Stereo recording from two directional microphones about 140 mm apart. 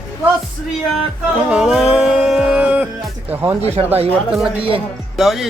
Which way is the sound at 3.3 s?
15° right (ahead or behind).